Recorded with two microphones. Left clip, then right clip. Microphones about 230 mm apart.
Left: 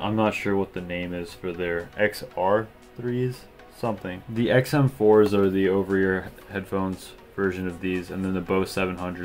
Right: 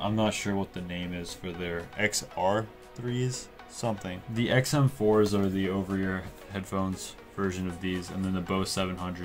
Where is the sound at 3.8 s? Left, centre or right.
Right.